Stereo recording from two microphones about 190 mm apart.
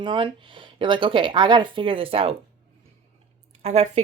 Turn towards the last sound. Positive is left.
turn(degrees=-35)  # may be behind; listen again after turning